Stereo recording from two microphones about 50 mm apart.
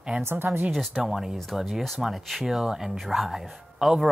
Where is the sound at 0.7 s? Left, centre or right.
Centre.